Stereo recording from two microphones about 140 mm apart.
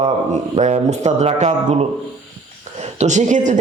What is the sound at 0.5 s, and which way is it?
Speech, 55° right (ahead or behind).